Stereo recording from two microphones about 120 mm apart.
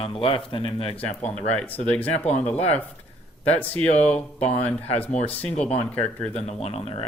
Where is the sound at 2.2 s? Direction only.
70° left (ahead or behind).